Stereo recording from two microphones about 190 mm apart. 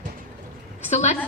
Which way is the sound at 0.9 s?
35° left (ahead or behind).